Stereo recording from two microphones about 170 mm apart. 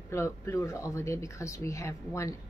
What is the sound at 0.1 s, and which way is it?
A woman's voice, 15° left (ahead or behind).